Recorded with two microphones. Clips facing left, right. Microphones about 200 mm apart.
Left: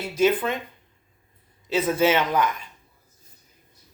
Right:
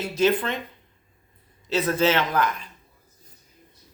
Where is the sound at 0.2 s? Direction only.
10° left (ahead or behind).